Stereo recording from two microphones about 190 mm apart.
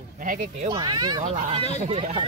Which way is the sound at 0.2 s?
45° right (ahead or behind).